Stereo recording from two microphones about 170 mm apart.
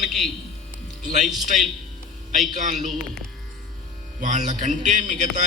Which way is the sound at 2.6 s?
45° right (ahead or behind).